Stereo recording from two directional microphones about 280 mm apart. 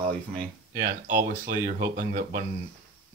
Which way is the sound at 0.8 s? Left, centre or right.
Right.